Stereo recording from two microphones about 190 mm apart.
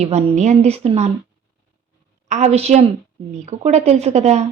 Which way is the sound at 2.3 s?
35° right (ahead or behind).